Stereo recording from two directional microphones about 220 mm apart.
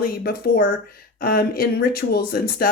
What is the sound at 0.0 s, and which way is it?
Speech, 45° left (ahead or behind).